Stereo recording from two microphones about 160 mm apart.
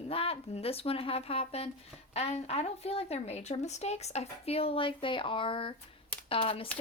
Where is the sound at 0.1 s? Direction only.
35° left (ahead or behind).